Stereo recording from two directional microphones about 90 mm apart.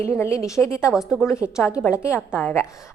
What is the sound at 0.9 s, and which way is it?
Speech, 5° right (ahead or behind).